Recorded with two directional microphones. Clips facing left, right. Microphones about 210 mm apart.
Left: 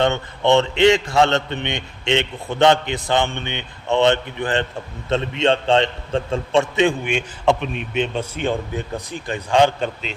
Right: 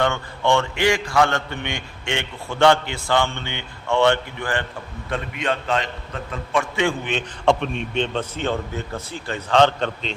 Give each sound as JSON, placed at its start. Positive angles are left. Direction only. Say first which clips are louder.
{"t": 0.0, "sound": "a man's voice", "louder": "left 3 dB", "side_deg": 20}